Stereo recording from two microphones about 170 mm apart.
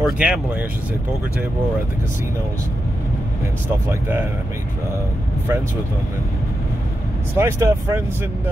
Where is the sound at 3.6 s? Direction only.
15° right (ahead or behind).